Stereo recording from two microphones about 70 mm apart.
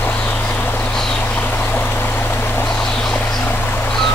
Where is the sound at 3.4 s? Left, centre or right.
Left.